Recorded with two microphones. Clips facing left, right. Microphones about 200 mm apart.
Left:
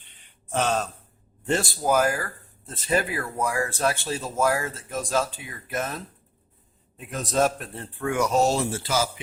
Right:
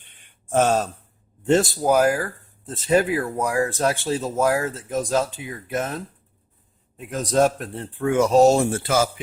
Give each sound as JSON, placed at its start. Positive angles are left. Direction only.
{"t": 0.0, "sound": "a sound", "side_deg": -45}
{"t": 1.8, "sound": "speech", "side_deg": -15}
{"t": 6.9, "sound": "speech", "side_deg": -10}